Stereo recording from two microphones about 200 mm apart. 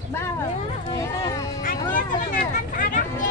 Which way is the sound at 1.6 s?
40° left (ahead or behind).